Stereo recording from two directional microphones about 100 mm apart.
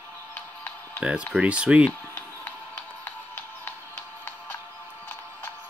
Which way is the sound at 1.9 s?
20° left (ahead or behind).